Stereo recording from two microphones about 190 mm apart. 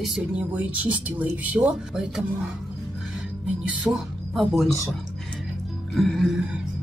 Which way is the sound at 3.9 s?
15° right (ahead or behind).